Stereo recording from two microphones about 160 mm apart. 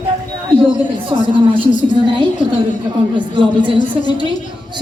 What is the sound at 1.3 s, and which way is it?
A woman's voice, 30° right (ahead or behind).